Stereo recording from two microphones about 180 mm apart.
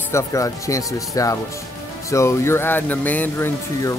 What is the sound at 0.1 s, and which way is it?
Speech, 15° left (ahead or behind).